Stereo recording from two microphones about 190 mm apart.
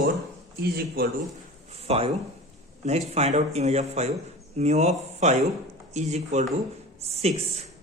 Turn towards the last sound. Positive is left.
turn(degrees=-35)  # may be behind; listen again after turning